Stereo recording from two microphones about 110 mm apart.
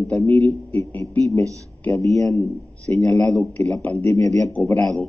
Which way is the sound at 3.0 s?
5° left (ahead or behind).